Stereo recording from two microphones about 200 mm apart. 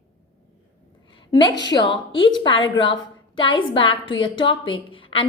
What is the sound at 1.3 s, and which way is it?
A woman's voice, 20° left (ahead or behind).